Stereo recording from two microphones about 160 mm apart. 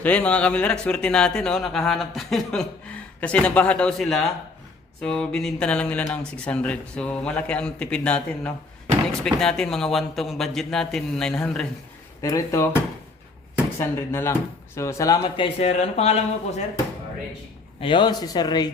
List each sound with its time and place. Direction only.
0.0 s speech: 10° left (ahead or behind)
12.2 s speech: 20° left (ahead or behind)
13.7 s speech: 15° left (ahead or behind)
15.5 s speech: 45° left (ahead or behind)
17.7 s speech: 30° left (ahead or behind)